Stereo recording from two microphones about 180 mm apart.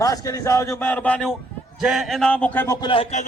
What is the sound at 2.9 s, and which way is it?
Music, 35° left (ahead or behind).